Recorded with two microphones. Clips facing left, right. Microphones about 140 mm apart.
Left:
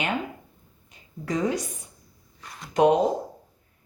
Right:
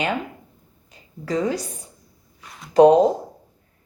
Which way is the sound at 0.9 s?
30° right (ahead or behind).